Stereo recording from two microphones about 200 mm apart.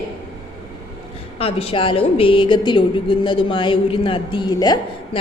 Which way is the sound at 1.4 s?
30° left (ahead or behind).